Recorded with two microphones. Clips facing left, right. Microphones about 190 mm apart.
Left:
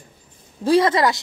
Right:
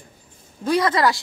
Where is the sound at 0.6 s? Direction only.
30° left (ahead or behind).